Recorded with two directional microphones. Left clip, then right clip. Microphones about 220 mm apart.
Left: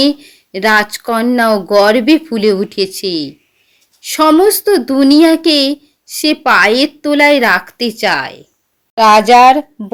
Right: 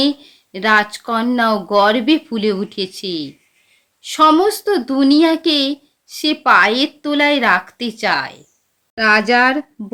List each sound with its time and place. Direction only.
0.0 s a child's voice: 20° left (ahead or behind)